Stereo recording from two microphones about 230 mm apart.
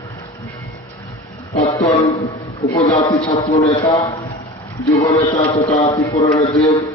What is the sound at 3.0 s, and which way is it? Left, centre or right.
A man's voice, centre.